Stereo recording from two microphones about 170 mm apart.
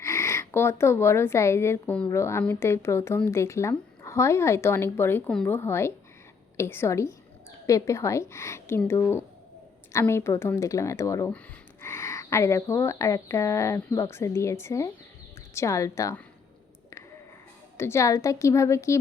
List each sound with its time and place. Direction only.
0.0 s speech: 15° left (ahead or behind)
17.7 s speech: 15° left (ahead or behind)